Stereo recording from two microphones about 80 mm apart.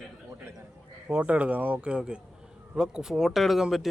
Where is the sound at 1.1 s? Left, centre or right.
Centre.